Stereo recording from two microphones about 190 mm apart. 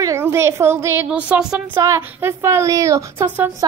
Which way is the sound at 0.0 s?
15° right (ahead or behind).